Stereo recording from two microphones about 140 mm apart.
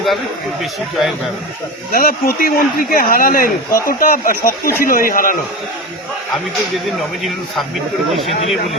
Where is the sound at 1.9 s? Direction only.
90° left.